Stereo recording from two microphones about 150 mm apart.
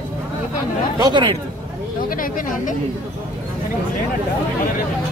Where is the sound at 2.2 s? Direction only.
60° left (ahead or behind).